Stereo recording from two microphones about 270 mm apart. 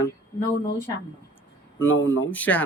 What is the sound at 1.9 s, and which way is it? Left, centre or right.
Speech, left.